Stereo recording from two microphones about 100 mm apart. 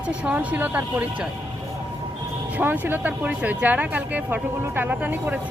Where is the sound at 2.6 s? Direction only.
20° right (ahead or behind).